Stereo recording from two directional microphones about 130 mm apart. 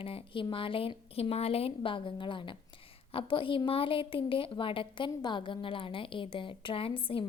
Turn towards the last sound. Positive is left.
turn(degrees=45)  # may be behind; listen again after turning